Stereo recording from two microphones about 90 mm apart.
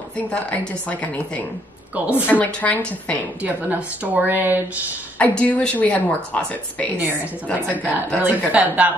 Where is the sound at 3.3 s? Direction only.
15° right (ahead or behind).